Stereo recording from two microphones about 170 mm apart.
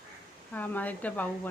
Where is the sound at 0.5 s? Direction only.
10° left (ahead or behind).